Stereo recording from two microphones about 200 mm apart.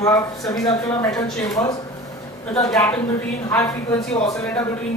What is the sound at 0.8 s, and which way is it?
Speech, 15° left (ahead or behind).